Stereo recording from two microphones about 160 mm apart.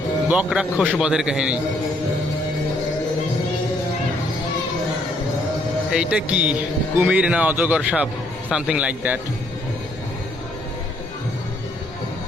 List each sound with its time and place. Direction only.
0.3 s speech: 5° right (ahead or behind)
5.9 s speech: 5° right (ahead or behind)